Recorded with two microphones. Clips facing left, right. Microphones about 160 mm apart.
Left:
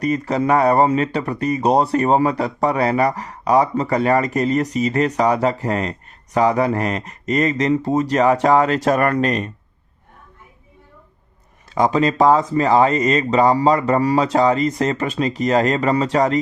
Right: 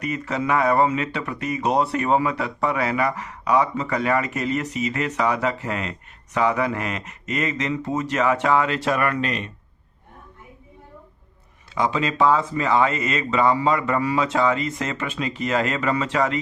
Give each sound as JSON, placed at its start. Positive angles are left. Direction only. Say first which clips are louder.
{"t": 0.0, "sound": "speech", "louder": "left 7 dB", "side_deg": 35}
{"t": 11.7, "sound": "speech", "louder": "left 6 dB", "side_deg": 40}